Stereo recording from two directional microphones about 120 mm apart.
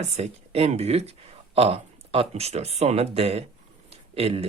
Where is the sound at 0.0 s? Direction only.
60° right (ahead or behind).